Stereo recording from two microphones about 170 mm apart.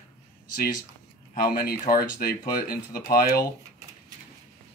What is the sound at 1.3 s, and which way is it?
Speech, 55° left (ahead or behind).